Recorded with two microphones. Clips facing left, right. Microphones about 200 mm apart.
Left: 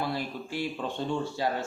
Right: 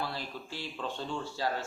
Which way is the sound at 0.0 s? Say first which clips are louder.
Left 6 dB; 15° left (ahead or behind).